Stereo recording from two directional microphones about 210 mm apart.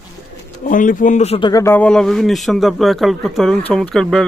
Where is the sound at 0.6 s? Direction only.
40° left (ahead or behind).